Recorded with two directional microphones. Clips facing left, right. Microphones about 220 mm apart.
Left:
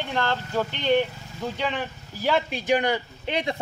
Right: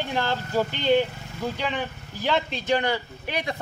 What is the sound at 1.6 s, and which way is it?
Speech, centre (ahead or behind).